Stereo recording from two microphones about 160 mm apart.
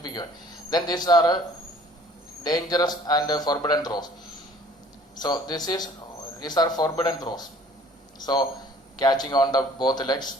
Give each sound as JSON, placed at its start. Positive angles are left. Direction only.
{"t": 0.0, "sound": "a sound", "side_deg": 25}
{"t": 0.7, "sound": "a man's voice", "side_deg": 25}
{"t": 2.4, "sound": "a man's voice", "side_deg": 25}
{"t": 5.1, "sound": "a man's voice", "side_deg": 25}